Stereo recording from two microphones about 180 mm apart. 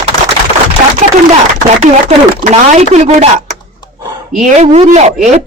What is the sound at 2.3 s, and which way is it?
A woman's voice, 40° right (ahead or behind).